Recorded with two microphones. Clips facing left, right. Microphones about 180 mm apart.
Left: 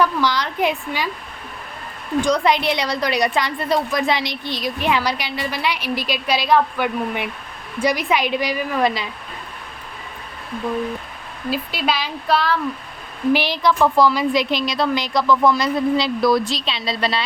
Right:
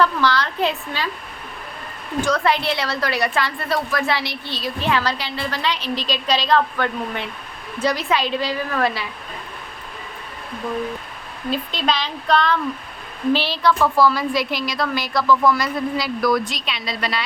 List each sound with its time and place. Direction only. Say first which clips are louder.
0.0 s a woman's voice: even; 15° left (ahead or behind)
2.2 s a woman's voice: left 1 dB; 15° left (ahead or behind)
11.5 s a woman's voice: even; 5° left (ahead or behind); by 17.2 s 30° left (ahead or behind)